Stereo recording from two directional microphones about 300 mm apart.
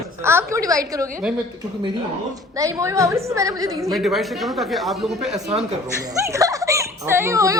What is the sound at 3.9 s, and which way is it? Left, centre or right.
A woman's voice, centre.